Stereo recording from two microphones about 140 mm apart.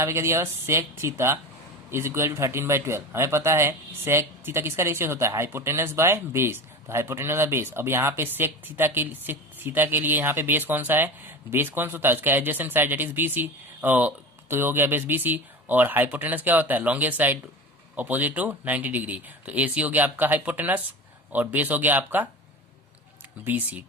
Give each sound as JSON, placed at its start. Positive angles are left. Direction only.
{"t": 0.0, "sound": "speech", "side_deg": -20}
{"t": 23.4, "sound": "speech", "side_deg": -15}